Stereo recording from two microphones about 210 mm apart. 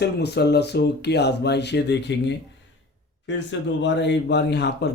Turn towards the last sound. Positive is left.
turn(degrees=55)  # may be behind; listen again after turning